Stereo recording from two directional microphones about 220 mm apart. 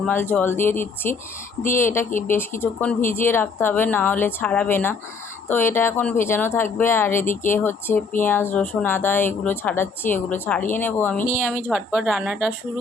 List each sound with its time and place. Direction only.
0.0 s speech: 10° left (ahead or behind)
11.5 s a woman's voice: 10° right (ahead or behind)